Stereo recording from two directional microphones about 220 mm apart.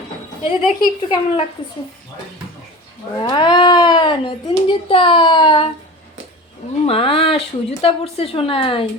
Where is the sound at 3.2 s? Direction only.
20° left (ahead or behind).